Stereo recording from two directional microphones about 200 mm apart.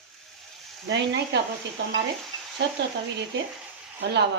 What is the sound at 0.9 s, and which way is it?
Speech, 60° right (ahead or behind).